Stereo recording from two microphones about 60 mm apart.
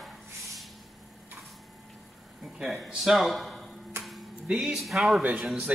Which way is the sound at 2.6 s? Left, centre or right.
Centre.